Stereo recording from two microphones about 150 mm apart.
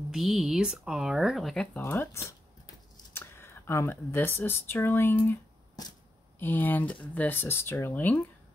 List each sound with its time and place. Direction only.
0.1 s speech: centre (ahead or behind)
1.8 s speech: 15° left (ahead or behind)
6.4 s speech: 10° left (ahead or behind)